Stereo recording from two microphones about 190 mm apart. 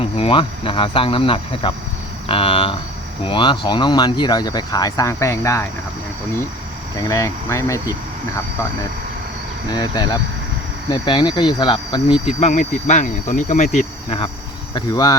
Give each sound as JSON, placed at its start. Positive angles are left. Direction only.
{"t": 0.0, "sound": "speech", "side_deg": 30}
{"t": 6.9, "sound": "speech", "side_deg": 15}
{"t": 9.7, "sound": "speech", "side_deg": 20}
{"t": 12.4, "sound": "speech", "side_deg": 40}
{"t": 14.8, "sound": "speech", "side_deg": 20}